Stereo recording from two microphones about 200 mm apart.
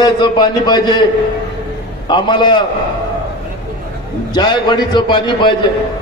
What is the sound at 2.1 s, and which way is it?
Speech, 25° left (ahead or behind).